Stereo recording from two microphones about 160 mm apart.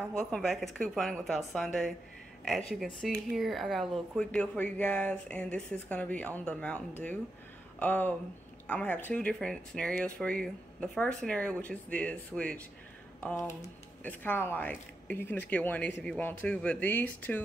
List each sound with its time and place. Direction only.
0.2 s speech: centre (ahead or behind)
7.8 s speech: 10° left (ahead or behind)